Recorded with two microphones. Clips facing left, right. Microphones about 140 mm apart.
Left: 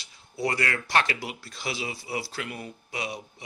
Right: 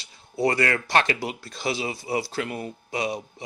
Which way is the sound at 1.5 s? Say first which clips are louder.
Right 5 dB; 25° right (ahead or behind).